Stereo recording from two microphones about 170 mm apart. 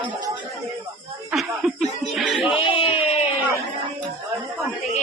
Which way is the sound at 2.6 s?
30° left (ahead or behind).